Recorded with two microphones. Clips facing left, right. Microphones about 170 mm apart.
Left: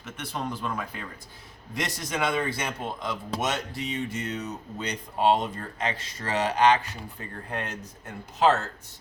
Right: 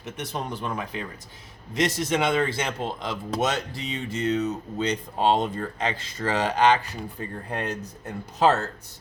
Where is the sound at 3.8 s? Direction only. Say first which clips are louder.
Right 6 dB; 30° right (ahead or behind).